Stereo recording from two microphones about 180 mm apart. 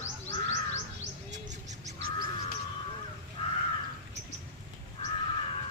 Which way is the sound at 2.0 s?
55° right (ahead or behind).